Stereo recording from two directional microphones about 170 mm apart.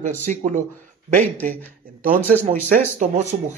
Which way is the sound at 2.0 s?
55° right (ahead or behind).